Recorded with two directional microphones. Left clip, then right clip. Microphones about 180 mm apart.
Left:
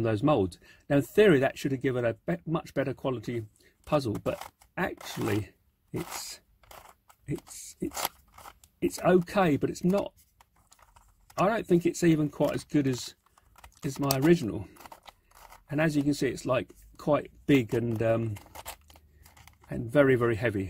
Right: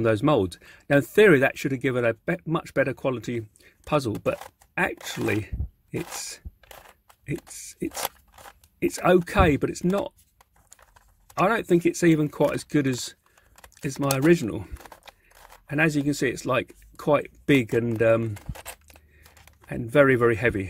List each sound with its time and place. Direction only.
0.0 s speech: 25° right (ahead or behind)
7.4 s speech: 20° right (ahead or behind)
8.4 s biting: 20° right (ahead or behind)
9.0 s speech: 20° right (ahead or behind)
11.3 s speech: 25° right (ahead or behind)
18.9 s a sound: centre (ahead or behind)
19.7 s speech: 25° right (ahead or behind)